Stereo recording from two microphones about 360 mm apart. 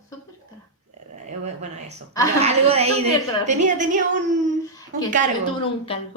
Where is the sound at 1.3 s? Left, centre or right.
Centre.